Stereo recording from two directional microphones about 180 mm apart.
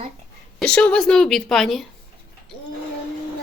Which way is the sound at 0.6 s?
5° left (ahead or behind).